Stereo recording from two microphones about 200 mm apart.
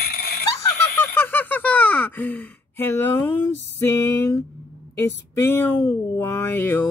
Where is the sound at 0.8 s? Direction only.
10° left (ahead or behind).